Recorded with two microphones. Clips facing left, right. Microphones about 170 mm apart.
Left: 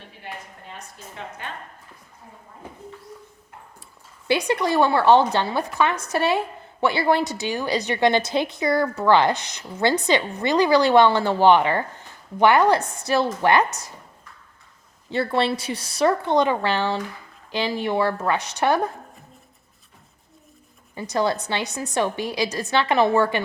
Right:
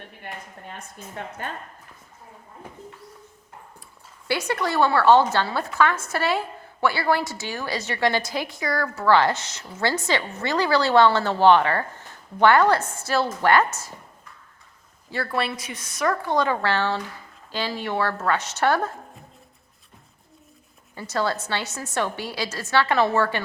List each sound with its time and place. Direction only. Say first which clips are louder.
0.9 s a woman's voice: right 4 dB; 50° right (ahead or behind)
4.3 s a woman's voice: left 4 dB; 15° left (ahead or behind)
15.1 s a woman's voice: left 5 dB; 25° left (ahead or behind)
20.9 s a woman's voice: left 3 dB; 15° left (ahead or behind)